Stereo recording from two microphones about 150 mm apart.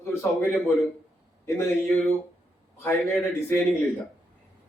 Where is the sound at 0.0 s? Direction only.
15° left (ahead or behind).